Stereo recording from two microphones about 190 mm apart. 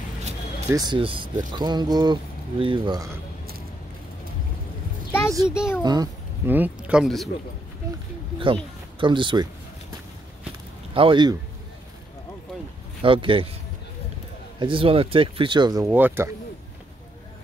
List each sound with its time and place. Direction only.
0.7 s speech: 20° right (ahead or behind)
5.4 s speech: 5° right (ahead or behind)
5.8 s a child's voice: 20° right (ahead or behind)
6.5 s speech: 5° right (ahead or behind)
9.0 s speech: 25° right (ahead or behind)
11.0 s speech: 25° right (ahead or behind)
13.0 s speech: 25° right (ahead or behind)
14.6 s speech: 30° right (ahead or behind); by 16.3 s 10° right (ahead or behind)